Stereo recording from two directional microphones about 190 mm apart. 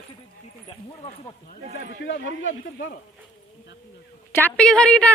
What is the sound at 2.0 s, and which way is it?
Speech, 70° left (ahead or behind).